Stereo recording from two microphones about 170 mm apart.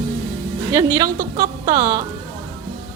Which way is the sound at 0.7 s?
20° right (ahead or behind).